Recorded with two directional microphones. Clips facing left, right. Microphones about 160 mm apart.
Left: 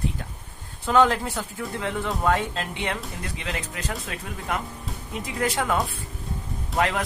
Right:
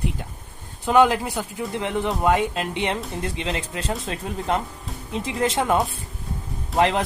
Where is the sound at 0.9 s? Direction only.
15° right (ahead or behind).